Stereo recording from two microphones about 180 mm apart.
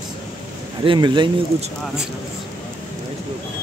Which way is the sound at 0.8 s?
25° right (ahead or behind).